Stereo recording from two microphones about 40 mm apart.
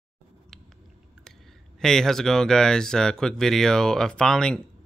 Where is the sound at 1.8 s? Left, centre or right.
Centre.